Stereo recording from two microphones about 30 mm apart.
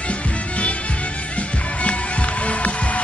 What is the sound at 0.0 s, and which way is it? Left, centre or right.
Music, left.